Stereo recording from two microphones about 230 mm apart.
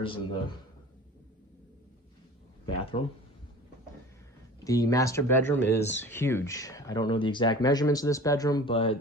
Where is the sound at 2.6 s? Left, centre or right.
Left.